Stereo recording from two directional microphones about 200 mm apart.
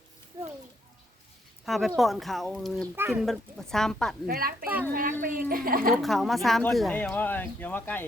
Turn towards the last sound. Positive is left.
turn(degrees=10)  # may be behind; listen again after turning